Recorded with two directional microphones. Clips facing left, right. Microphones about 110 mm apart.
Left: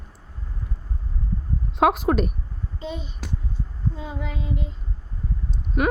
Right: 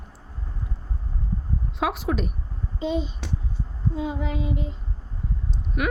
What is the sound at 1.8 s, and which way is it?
Speech, 50° left (ahead or behind).